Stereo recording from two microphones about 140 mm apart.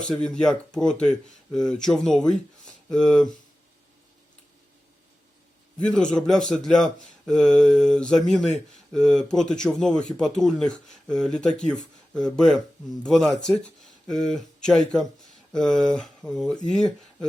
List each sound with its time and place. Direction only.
0.1 s speech: 5° left (ahead or behind)
5.8 s speech: 5° left (ahead or behind)